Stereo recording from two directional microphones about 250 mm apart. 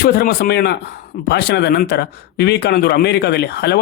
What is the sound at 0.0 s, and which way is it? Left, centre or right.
Speech, left.